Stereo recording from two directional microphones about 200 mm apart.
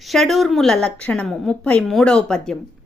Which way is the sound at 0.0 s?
Centre (ahead or behind).